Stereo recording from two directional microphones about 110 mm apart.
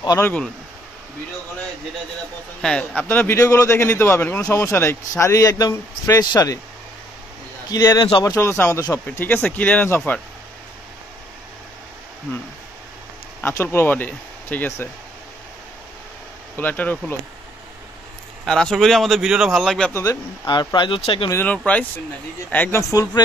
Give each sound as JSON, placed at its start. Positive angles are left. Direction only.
{"t": 2.6, "sound": "speech", "side_deg": 5}
{"t": 3.0, "sound": "speech", "side_deg": 15}
{"t": 3.3, "sound": "a man's voice", "side_deg": 30}
{"t": 7.7, "sound": "a man's voice", "side_deg": 35}
{"t": 13.4, "sound": "speech", "side_deg": 20}
{"t": 16.5, "sound": "speech", "side_deg": 15}
{"t": 18.4, "sound": "a man's voice", "side_deg": 5}
{"t": 19.9, "sound": "a man's voice", "side_deg": 30}
{"t": 20.4, "sound": "speech", "side_deg": 45}
{"t": 21.0, "sound": "speech", "side_deg": 55}
{"t": 21.3, "sound": "speech", "side_deg": 15}
{"t": 22.8, "sound": "a man's voice", "side_deg": 30}